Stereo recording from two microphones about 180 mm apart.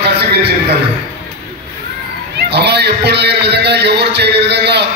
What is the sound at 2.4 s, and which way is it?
A man's voice, 65° right (ahead or behind).